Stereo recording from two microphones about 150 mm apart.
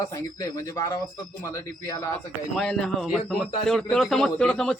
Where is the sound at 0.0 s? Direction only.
20° left (ahead or behind).